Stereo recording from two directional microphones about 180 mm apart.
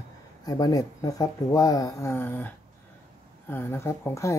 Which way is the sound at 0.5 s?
20° left (ahead or behind).